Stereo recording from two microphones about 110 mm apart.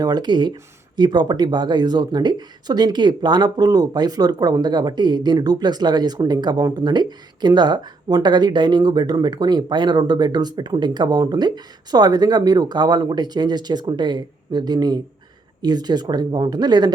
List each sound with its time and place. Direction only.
0.0 s speech: 40° right (ahead or behind)